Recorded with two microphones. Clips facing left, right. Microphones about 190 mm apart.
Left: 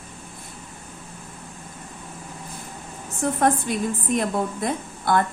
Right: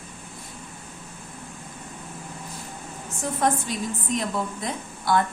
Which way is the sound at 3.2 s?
55° left (ahead or behind).